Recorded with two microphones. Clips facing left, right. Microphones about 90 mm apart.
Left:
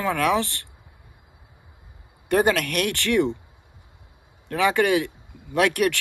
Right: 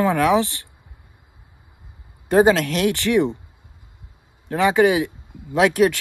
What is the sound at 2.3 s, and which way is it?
Speech, 25° right (ahead or behind).